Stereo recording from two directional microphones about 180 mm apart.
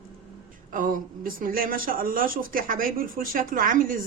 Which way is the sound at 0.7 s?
50° right (ahead or behind).